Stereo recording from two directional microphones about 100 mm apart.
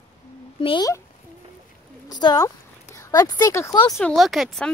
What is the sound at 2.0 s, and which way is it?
Speech, 40° left (ahead or behind).